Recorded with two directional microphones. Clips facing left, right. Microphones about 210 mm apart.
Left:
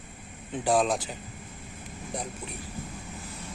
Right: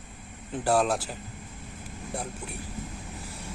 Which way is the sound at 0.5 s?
5° right (ahead or behind).